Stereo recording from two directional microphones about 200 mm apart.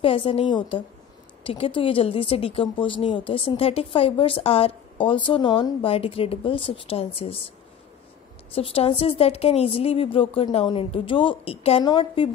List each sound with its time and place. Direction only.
0.0 s speech: 25° left (ahead or behind)
8.5 s speech: 30° left (ahead or behind)